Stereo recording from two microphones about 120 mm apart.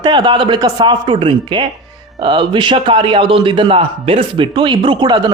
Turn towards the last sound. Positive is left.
turn(degrees=-40)  # may be behind; listen again after turning